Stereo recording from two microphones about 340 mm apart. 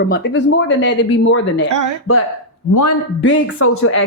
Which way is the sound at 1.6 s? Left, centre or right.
Right.